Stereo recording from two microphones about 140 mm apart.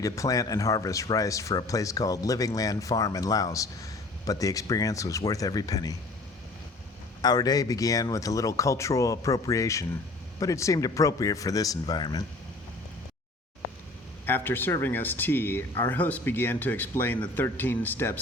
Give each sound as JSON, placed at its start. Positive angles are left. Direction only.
{"t": 0.0, "sound": "speech", "side_deg": 25}
{"t": 7.2, "sound": "speech", "side_deg": 30}
{"t": 14.3, "sound": "speech", "side_deg": 15}